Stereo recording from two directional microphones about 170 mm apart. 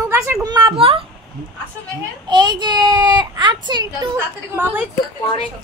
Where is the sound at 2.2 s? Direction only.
25° right (ahead or behind).